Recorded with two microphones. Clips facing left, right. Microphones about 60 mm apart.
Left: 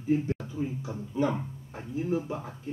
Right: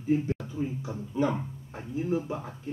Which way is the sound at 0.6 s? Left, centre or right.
Centre.